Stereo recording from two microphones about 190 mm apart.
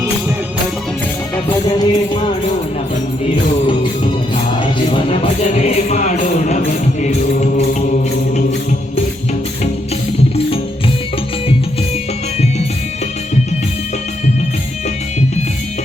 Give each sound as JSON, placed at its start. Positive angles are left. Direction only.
{"t": 1.5, "sound": "music", "side_deg": 25}
{"t": 4.6, "sound": "music", "side_deg": 25}